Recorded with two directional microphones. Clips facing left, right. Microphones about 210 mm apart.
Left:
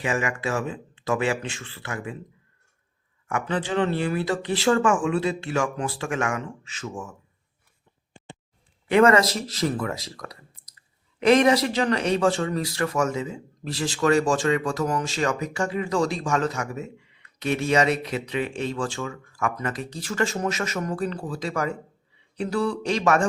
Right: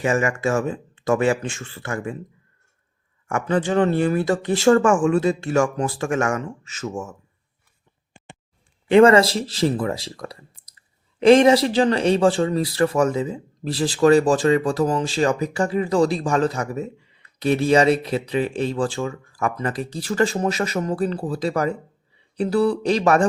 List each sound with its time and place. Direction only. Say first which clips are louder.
0.0 s speech: right 6 dB; 45° right (ahead or behind)
3.2 s speech: right 5 dB; 45° right (ahead or behind)
8.9 s a man's voice: right 5 dB; 30° right (ahead or behind)